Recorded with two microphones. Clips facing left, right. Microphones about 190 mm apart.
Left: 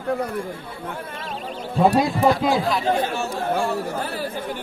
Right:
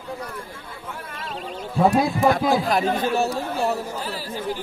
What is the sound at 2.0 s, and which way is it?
Speech, centre (ahead or behind).